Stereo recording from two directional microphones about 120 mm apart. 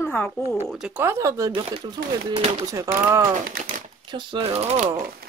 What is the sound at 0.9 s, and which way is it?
Speech, 20° right (ahead or behind).